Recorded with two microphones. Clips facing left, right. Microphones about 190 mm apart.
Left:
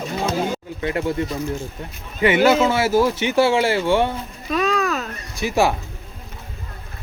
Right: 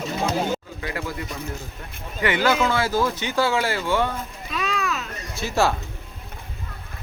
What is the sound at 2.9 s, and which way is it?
Speech, 10° left (ahead or behind).